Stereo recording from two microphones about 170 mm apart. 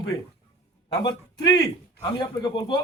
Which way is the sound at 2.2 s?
25° left (ahead or behind).